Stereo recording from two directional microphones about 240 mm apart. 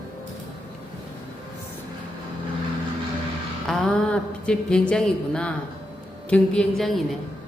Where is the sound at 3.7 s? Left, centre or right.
Centre.